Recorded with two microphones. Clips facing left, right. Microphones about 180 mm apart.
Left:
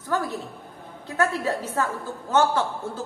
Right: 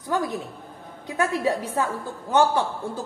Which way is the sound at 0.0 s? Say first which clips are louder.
Right 1 dB; 15° right (ahead or behind).